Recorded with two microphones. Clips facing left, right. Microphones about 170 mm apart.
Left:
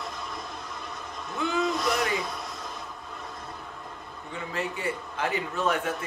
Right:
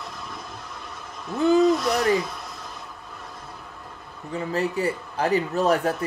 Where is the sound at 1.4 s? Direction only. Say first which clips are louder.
Right 10 dB; 40° right (ahead or behind).